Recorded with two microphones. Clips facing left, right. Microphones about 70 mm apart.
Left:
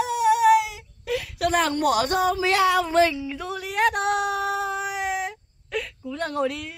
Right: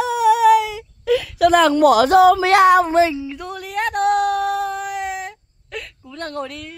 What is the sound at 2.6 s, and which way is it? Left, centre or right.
Speech, right.